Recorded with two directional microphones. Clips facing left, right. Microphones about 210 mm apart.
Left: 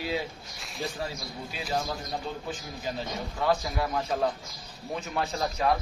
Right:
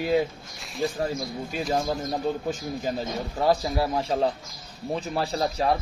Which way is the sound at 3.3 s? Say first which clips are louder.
Right 4 dB; 35° right (ahead or behind).